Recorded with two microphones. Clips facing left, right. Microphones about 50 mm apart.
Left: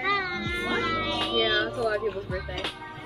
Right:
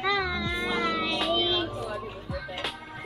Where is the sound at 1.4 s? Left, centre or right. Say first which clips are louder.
Left 4 dB; left.